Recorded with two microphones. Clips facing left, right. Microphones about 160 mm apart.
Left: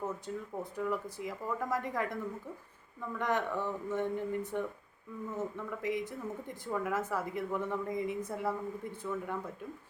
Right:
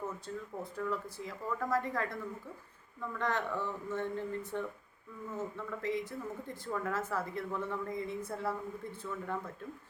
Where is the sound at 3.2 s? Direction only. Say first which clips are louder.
Left 2 dB; 15° left (ahead or behind).